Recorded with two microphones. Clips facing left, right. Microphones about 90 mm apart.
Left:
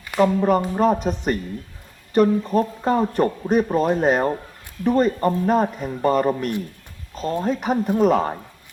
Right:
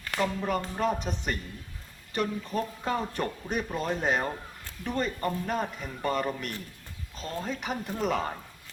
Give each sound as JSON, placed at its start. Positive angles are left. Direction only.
{"t": 0.2, "sound": "speech", "side_deg": 40}